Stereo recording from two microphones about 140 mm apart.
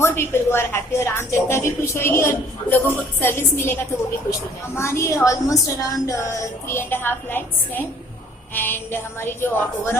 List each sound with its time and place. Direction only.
0.0 s a woman's voice: 15° left (ahead or behind)